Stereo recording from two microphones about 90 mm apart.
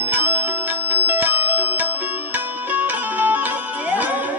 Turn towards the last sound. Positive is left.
turn(degrees=-20)  # may be behind; listen again after turning